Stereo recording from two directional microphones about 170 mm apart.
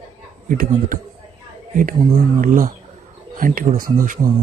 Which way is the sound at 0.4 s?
55° right (ahead or behind).